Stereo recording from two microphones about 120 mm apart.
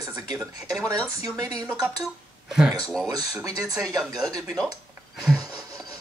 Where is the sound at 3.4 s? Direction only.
30° right (ahead or behind).